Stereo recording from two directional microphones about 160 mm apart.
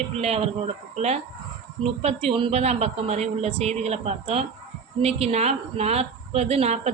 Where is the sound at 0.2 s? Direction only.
40° right (ahead or behind).